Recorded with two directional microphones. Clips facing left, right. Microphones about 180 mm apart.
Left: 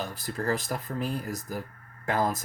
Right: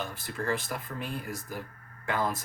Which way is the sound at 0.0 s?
40° left (ahead or behind).